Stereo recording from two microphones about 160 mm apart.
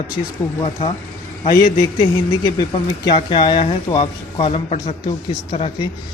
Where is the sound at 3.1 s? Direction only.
30° left (ahead or behind).